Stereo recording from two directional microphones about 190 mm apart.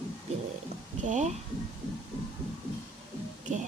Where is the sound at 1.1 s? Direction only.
40° right (ahead or behind).